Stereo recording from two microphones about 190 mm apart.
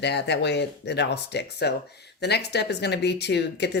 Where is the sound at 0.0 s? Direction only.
65° left (ahead or behind).